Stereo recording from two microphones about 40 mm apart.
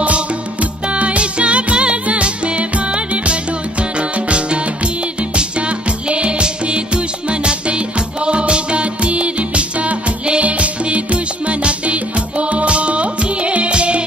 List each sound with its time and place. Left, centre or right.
0.0 s music: right
5.3 s music: right